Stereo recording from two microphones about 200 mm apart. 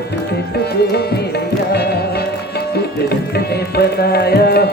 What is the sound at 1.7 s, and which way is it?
Music, 55° left (ahead or behind).